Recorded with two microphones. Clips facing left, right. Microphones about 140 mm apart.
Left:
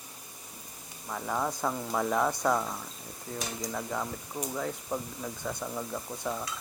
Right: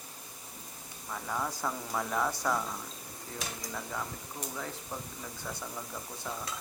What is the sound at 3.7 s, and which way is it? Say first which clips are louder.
Speech: left 4 dB; 10° left (ahead or behind).